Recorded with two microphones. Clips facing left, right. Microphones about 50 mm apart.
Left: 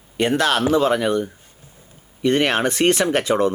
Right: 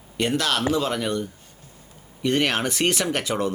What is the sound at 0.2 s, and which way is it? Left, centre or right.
Speech, centre.